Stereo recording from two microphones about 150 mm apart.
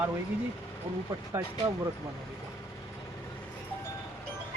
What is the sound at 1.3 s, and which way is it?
Speech, 20° right (ahead or behind).